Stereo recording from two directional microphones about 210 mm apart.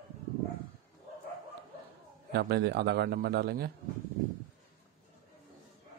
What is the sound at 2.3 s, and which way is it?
Speech, 50° right (ahead or behind).